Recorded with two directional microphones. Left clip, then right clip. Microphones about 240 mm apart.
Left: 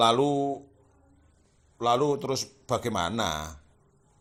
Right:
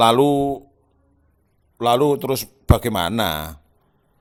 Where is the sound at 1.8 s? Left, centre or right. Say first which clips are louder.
Right 8 dB; right.